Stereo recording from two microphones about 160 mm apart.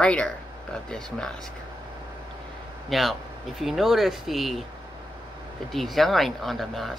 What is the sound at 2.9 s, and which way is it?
Speech, centre (ahead or behind).